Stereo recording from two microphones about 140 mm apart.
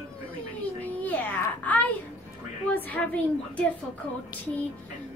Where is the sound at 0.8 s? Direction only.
10° left (ahead or behind).